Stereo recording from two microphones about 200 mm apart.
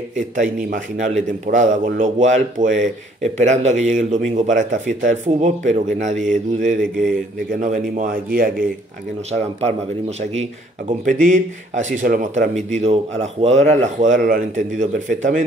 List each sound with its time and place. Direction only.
0.1 s speech: 40° right (ahead or behind)
9.3 s speech: 35° right (ahead or behind)